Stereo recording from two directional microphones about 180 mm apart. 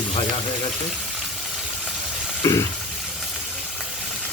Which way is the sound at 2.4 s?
20° left (ahead or behind).